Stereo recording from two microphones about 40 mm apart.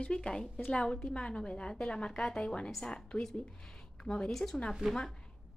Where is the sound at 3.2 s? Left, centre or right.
Centre.